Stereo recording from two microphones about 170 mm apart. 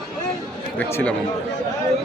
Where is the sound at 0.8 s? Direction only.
10° left (ahead or behind).